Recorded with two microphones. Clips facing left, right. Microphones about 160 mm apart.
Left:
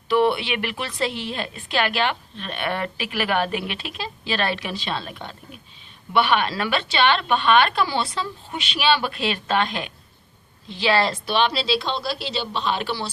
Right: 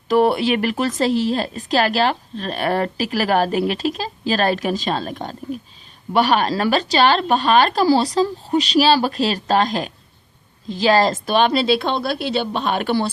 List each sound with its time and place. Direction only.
0.1 s a woman's voice: 40° right (ahead or behind)